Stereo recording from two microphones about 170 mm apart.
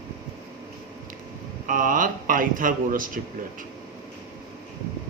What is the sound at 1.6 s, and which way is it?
Speech, 50° right (ahead or behind).